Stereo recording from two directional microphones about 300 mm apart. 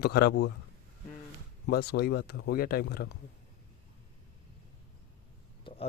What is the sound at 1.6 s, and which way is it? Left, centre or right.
A man's voice, left.